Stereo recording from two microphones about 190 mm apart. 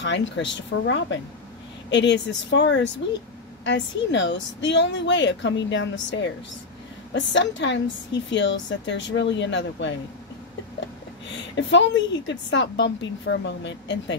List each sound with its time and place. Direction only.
0.0 s a woman's voice: 70° left (ahead or behind)
11.2 s a woman's voice: 70° left (ahead or behind)